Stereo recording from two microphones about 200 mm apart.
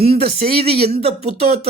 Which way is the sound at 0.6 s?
30° right (ahead or behind).